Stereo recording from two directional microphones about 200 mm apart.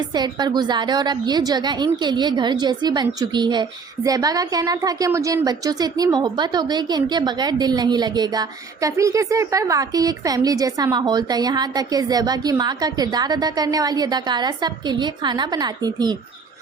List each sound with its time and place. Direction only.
0.1 s a woman's voice: 20° right (ahead or behind)